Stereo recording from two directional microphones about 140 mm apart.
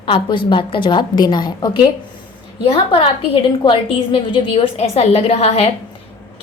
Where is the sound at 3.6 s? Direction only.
40° left (ahead or behind).